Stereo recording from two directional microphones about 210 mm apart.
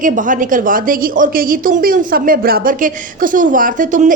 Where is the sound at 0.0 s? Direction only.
40° right (ahead or behind).